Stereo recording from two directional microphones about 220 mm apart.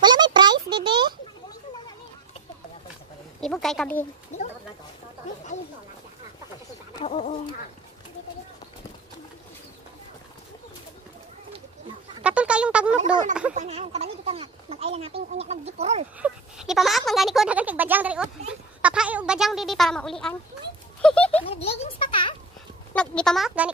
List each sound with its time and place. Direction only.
0.0 s a sound: 20° right (ahead or behind)
3.3 s speech: centre (ahead or behind)
7.0 s a child's voice: 25° left (ahead or behind)
12.2 s speech: 5° right (ahead or behind)
13.5 s speech: 30° right (ahead or behind)
16.2 s speech: centre (ahead or behind)
21.4 s a child's voice: 25° left (ahead or behind)
22.9 s speech: 5° left (ahead or behind)